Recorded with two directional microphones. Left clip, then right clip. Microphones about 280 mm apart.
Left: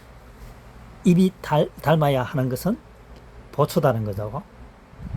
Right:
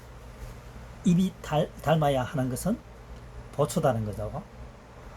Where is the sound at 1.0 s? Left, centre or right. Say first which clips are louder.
Left 8 dB; left.